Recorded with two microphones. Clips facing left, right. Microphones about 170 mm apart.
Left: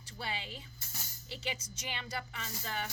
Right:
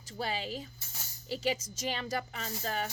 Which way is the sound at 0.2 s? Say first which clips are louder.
Right 6 dB; 40° right (ahead or behind).